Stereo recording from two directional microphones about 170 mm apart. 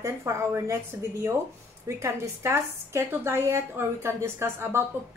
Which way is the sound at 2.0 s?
15° right (ahead or behind).